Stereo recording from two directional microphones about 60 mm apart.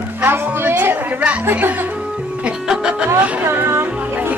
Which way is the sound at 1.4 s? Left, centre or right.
Right.